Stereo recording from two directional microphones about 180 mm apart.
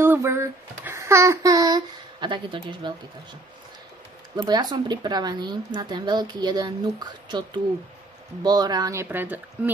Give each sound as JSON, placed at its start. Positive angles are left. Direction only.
{"t": 0.0, "sound": "speech", "side_deg": -15}
{"t": 4.4, "sound": "speech", "side_deg": -20}